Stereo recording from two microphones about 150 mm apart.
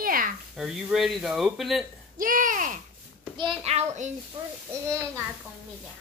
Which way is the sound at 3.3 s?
35° right (ahead or behind).